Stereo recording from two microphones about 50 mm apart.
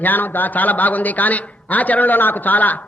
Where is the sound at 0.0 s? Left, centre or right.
Left.